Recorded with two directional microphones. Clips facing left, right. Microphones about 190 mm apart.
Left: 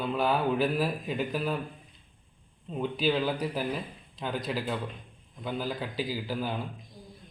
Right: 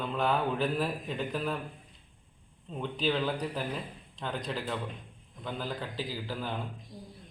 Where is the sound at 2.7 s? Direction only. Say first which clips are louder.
Left 3 dB; 10° left (ahead or behind).